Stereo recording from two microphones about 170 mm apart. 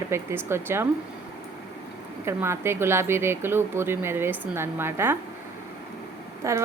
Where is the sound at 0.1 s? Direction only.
15° right (ahead or behind).